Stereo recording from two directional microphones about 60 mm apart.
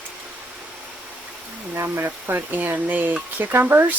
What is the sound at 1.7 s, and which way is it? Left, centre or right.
Speech, right.